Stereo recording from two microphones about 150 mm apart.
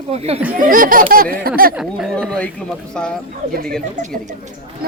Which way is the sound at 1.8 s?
Centre (ahead or behind).